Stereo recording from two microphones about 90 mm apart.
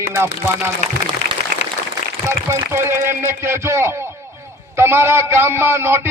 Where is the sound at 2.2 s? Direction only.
30° right (ahead or behind).